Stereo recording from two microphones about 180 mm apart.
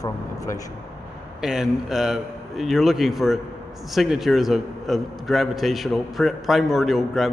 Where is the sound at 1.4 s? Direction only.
Centre (ahead or behind).